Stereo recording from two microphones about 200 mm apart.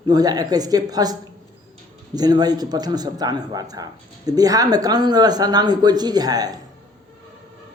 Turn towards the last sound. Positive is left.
turn(degrees=-20)  # may be behind; listen again after turning